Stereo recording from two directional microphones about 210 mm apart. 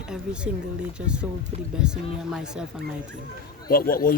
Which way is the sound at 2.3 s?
5° right (ahead or behind).